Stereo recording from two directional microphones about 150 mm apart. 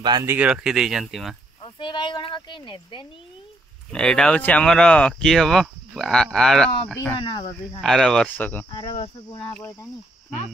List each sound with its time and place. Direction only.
0.0 s speech: 30° right (ahead or behind)
0.3 s speech: 10° right (ahead or behind)
1.6 s speech: 30° left (ahead or behind)
3.9 s speech: 5° left (ahead or behind)
8.6 s speech: 40° left (ahead or behind)
9.5 s cricket: 15° left (ahead or behind)